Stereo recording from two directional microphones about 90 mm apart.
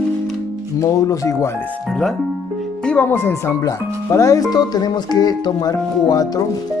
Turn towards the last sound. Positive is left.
turn(degrees=45)  # may be behind; listen again after turning